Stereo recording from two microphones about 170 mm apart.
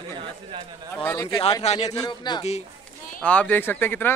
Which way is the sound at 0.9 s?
15° left (ahead or behind).